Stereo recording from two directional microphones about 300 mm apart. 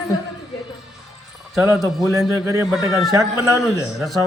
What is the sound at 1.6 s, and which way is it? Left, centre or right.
A man's voice, centre.